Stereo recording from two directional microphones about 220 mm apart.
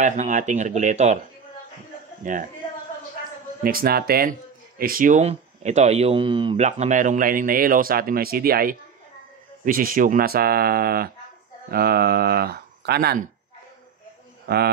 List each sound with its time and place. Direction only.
0.0 s speech: 35° right (ahead or behind)
2.2 s speech: 35° right (ahead or behind)
3.6 s speech: 45° right (ahead or behind)
14.4 s a sound: 45° right (ahead or behind)